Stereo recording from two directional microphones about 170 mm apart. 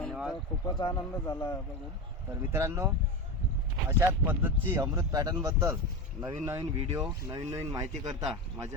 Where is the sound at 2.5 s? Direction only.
15° right (ahead or behind).